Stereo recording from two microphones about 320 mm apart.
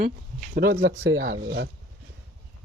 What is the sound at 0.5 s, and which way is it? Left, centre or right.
Speech, right.